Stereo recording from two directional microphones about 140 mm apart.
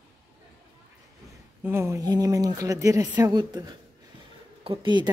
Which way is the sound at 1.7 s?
20° right (ahead or behind).